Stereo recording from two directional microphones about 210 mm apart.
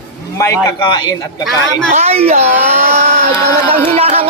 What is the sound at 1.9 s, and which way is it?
Speech, 30° right (ahead or behind).